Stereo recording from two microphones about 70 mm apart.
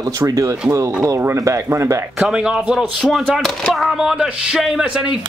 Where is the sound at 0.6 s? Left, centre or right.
Right.